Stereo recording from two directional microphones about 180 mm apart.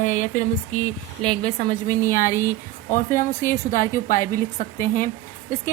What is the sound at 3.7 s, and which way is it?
Speech, 50° left (ahead or behind).